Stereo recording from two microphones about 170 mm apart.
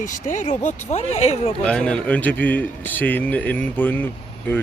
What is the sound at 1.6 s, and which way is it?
A man's voice, 5° left (ahead or behind).